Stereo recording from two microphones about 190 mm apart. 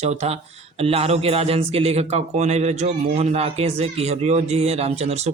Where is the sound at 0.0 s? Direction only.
35° right (ahead or behind).